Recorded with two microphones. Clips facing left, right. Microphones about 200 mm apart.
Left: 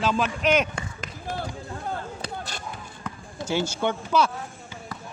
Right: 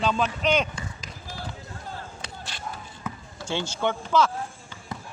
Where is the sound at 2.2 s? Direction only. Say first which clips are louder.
Left 6 dB; 40° left (ahead or behind).